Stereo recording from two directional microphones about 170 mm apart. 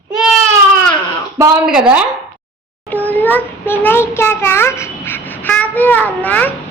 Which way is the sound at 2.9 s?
10° left (ahead or behind).